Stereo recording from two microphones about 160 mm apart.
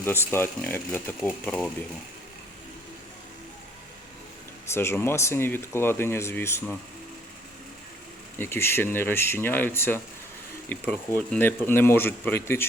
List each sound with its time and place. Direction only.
0.0 s speech: 15° left (ahead or behind)
4.7 s speech: 15° left (ahead or behind)
8.4 s speech: 15° left (ahead or behind)